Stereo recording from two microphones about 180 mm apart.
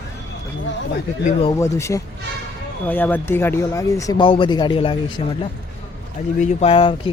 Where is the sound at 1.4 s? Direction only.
20° left (ahead or behind).